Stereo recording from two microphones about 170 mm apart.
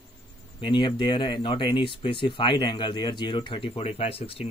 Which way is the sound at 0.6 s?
30° left (ahead or behind).